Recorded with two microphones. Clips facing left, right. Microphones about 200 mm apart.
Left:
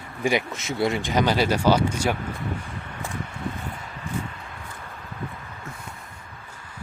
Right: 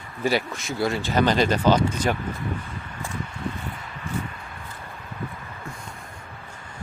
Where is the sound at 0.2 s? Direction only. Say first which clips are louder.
Even; 15° left (ahead or behind).